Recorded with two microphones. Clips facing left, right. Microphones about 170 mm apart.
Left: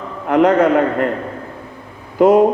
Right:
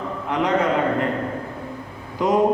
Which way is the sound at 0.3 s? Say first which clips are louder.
Left 8 dB; 60° left (ahead or behind).